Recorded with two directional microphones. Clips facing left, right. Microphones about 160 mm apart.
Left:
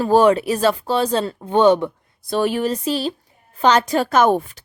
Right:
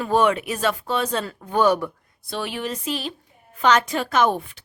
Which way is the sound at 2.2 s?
45° left (ahead or behind).